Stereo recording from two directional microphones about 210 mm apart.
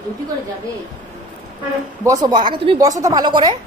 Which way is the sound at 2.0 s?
20° right (ahead or behind).